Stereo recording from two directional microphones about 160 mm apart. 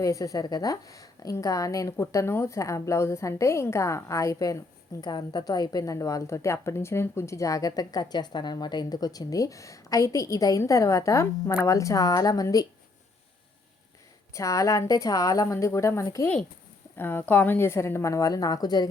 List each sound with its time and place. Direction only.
0.0 s a woman's voice: 20° left (ahead or behind)
14.3 s a woman's voice: 20° left (ahead or behind)